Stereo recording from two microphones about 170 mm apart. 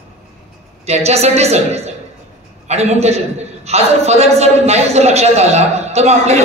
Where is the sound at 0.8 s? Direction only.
40° right (ahead or behind).